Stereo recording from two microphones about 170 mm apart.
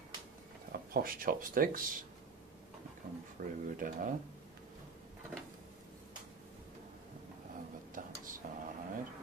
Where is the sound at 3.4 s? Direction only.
50° right (ahead or behind).